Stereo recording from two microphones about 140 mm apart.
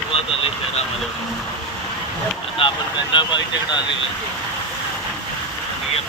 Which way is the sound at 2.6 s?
35° left (ahead or behind).